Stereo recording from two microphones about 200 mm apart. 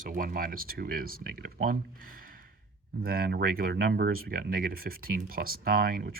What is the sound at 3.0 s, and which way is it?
Speech, 45° right (ahead or behind).